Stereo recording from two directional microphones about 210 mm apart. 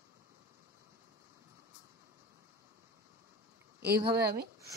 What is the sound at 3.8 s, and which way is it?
Speech, 50° right (ahead or behind).